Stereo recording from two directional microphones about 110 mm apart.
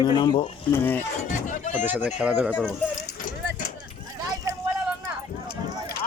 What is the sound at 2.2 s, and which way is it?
Speech, 10° right (ahead or behind).